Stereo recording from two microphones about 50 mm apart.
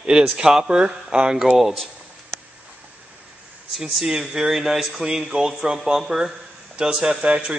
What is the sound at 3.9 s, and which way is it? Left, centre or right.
A man's voice, centre.